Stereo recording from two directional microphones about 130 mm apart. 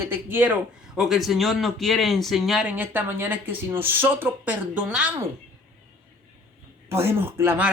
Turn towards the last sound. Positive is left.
turn(degrees=-20)  # may be behind; listen again after turning